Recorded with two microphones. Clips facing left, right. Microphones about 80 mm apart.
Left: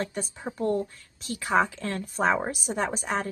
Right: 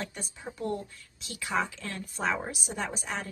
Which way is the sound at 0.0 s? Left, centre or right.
Left.